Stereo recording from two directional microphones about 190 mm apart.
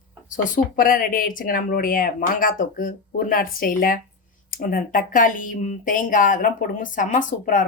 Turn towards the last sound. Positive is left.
turn(degrees=45)  # may be behind; listen again after turning